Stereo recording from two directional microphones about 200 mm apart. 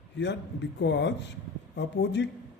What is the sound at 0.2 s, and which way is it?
A man's voice, 60° left (ahead or behind).